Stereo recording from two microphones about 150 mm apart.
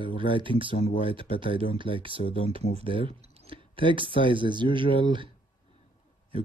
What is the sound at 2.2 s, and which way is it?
Speech, 35° left (ahead or behind).